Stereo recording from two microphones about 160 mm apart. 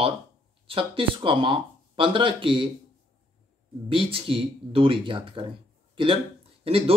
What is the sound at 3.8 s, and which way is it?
Speech, 35° right (ahead or behind).